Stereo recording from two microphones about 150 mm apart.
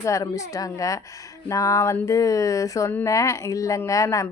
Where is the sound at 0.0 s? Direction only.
20° left (ahead or behind).